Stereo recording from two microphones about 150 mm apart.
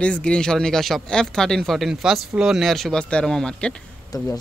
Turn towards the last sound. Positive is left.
turn(degrees=25)  # may be behind; listen again after turning